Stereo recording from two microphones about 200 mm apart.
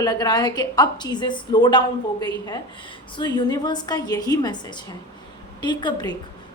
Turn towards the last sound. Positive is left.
turn(degrees=20)  # may be behind; listen again after turning